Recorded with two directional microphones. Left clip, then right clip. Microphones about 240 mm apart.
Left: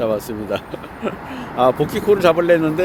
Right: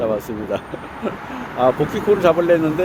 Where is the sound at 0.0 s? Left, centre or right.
Centre.